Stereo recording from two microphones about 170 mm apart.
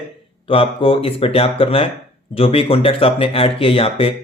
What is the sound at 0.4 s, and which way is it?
Speech, 30° left (ahead or behind).